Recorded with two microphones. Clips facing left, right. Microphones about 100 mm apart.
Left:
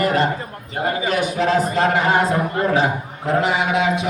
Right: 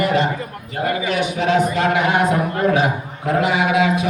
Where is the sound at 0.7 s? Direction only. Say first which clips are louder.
Right 1 dB; 25° left (ahead or behind).